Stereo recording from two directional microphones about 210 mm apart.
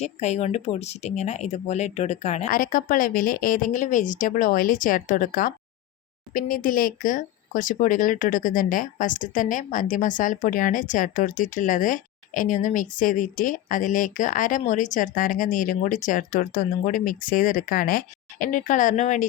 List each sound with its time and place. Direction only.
0.0 s speech: 30° left (ahead or behind)